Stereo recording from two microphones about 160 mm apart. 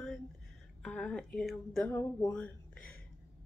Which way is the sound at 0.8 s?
5° left (ahead or behind).